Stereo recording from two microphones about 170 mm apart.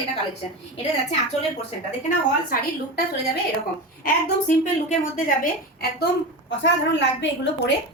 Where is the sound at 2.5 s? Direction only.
55° left (ahead or behind).